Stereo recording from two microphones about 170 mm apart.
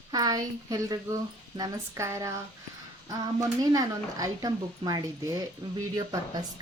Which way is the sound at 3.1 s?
20° right (ahead or behind).